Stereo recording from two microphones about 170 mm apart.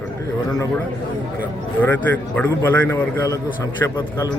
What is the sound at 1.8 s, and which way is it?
Speech, 10° left (ahead or behind).